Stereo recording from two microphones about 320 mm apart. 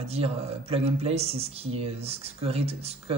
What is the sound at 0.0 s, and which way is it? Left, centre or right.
Speech, centre.